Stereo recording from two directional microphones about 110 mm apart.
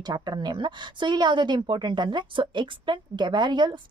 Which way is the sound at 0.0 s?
40° right (ahead or behind).